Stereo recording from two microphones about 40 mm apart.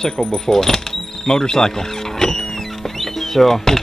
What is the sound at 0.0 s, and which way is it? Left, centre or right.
Speech, centre.